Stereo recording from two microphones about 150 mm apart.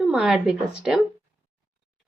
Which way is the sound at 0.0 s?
5° right (ahead or behind).